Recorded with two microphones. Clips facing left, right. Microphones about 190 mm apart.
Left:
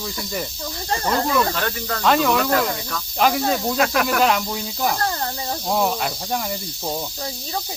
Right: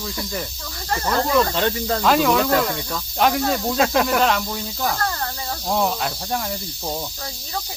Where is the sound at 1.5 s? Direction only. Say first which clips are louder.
Right 4 dB; 25° right (ahead or behind).